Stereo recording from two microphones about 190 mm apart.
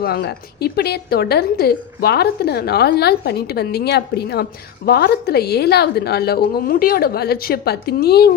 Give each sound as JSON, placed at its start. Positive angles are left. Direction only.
{"t": 0.0, "sound": "a woman's voice", "side_deg": 55}